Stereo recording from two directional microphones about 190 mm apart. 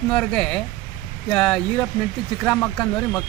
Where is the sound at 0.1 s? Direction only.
5° left (ahead or behind).